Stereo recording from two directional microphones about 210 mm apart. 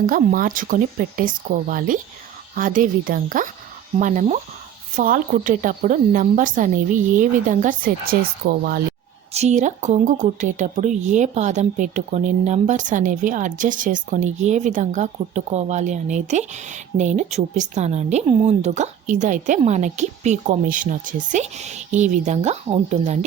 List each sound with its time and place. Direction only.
0.0 s a woman's voice: 40° right (ahead or behind)
9.3 s a woman's voice: 30° right (ahead or behind)